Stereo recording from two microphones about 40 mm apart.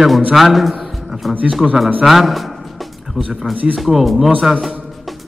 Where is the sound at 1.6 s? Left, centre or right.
Centre.